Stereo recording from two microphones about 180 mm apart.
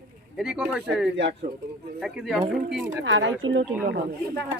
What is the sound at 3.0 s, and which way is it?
Speech, 90° right.